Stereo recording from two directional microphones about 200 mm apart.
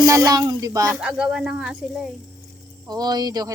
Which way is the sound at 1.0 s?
5° right (ahead or behind).